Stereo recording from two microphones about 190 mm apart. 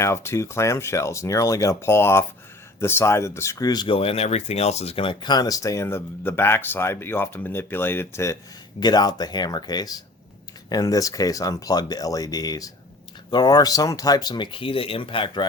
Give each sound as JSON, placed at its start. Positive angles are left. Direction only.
{"t": 0.0, "sound": "speech", "side_deg": 15}